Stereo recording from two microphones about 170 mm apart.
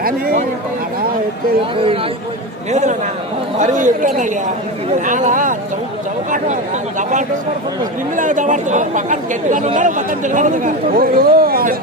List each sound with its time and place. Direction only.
0.0 s speech: 60° right (ahead or behind)
3.6 s speech: 45° right (ahead or behind)
8.1 s speech: 50° right (ahead or behind)